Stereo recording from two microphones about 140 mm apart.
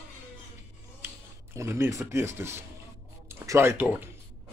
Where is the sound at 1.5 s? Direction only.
20° right (ahead or behind).